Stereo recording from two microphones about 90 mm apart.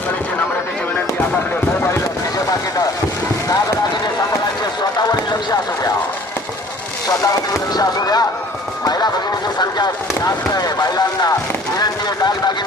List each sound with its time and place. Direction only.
4.9 s run: 45° left (ahead or behind)
7.7 s basketball bounce: 45° left (ahead or behind)
8.8 s music: 45° left (ahead or behind)
9.6 s a sound: 50° left (ahead or behind)